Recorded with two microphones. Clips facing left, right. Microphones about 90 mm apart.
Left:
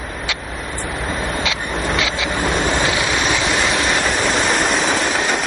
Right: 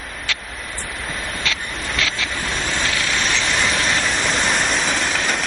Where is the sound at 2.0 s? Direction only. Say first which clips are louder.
Left 4 dB; 15° left (ahead or behind).